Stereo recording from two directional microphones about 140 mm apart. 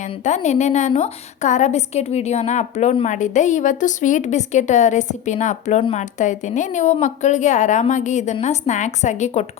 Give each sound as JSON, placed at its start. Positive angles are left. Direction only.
{"t": 0.0, "sound": "a woman's voice", "side_deg": 55}